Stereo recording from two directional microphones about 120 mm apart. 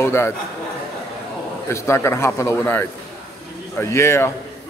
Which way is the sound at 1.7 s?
20° left (ahead or behind).